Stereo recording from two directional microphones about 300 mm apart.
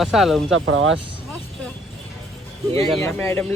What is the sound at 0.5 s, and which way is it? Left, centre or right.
Speech, right.